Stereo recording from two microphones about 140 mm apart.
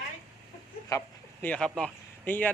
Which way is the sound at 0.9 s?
20° left (ahead or behind).